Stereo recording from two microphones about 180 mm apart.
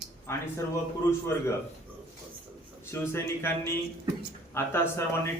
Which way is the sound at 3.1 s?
15° left (ahead or behind).